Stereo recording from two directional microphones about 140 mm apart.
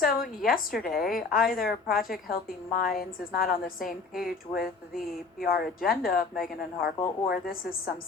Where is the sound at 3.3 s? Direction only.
90° left.